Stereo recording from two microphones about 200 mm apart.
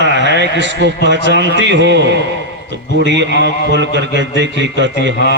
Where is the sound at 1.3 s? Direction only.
65° right (ahead or behind).